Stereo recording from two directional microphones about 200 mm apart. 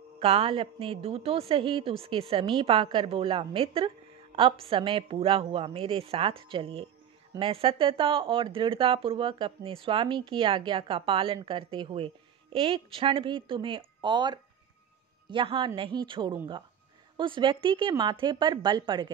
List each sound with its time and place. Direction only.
0.2 s speech: 30° right (ahead or behind)